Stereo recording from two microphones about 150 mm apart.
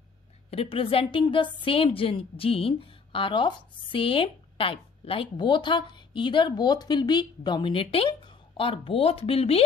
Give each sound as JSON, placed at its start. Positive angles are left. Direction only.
{"t": 0.5, "sound": "a woman's voice", "side_deg": 40}